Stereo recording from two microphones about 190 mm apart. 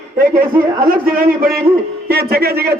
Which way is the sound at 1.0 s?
50° right (ahead or behind).